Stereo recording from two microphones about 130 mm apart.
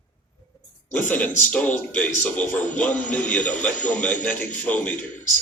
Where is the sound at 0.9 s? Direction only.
15° left (ahead or behind).